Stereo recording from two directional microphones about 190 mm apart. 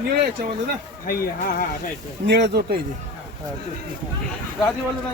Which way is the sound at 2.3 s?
65° right (ahead or behind).